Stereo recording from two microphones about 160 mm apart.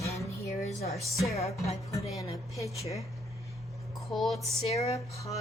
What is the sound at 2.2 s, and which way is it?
Speech, 20° left (ahead or behind).